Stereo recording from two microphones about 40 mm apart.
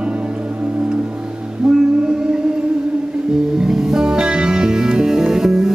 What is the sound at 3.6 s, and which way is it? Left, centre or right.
Music, centre.